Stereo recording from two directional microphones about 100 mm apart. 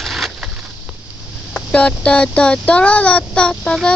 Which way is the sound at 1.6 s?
10° left (ahead or behind).